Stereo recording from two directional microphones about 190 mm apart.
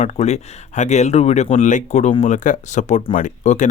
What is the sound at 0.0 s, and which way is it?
A man's voice, 35° left (ahead or behind).